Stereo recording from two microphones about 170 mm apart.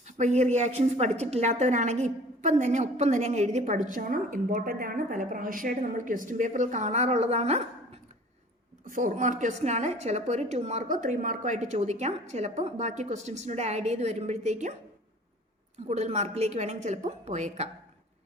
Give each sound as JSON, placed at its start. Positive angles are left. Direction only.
{"t": 0.2, "sound": "a woman's voice", "side_deg": -40}
{"t": 8.9, "sound": "a woman's voice", "side_deg": -50}
{"t": 15.9, "sound": "a woman's voice", "side_deg": -40}